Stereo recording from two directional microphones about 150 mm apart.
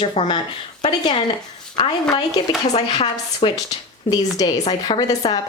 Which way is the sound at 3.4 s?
35° left (ahead or behind).